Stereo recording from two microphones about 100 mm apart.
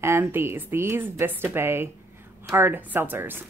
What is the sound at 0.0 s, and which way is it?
Speech, 25° right (ahead or behind).